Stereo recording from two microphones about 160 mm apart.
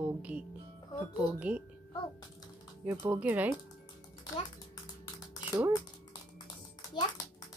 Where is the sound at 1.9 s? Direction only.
30° left (ahead or behind).